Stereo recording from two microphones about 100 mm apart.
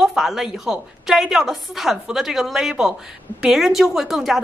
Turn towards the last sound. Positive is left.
turn(degrees=-5)  # may be behind; listen again after turning